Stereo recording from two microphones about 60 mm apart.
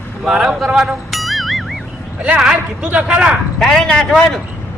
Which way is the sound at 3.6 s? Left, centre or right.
Centre.